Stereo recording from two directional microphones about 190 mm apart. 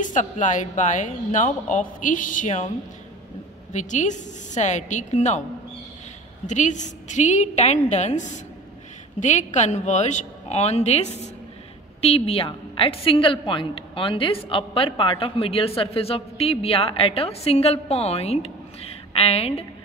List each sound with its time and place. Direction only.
0.0 s a woman's voice: 40° left (ahead or behind)
3.7 s a woman's voice: 40° left (ahead or behind)
6.4 s a woman's voice: 40° left (ahead or behind)